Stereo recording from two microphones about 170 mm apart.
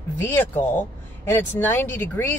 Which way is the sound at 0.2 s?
10° left (ahead or behind).